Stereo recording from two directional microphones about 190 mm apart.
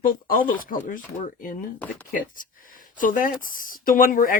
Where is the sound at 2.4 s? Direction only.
45° left (ahead or behind).